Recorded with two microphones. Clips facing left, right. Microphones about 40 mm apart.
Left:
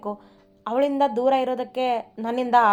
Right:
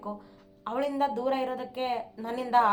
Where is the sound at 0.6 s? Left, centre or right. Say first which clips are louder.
Left 7 dB; left.